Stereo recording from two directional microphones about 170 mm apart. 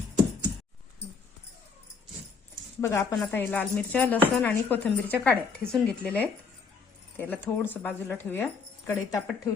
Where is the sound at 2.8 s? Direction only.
15° left (ahead or behind).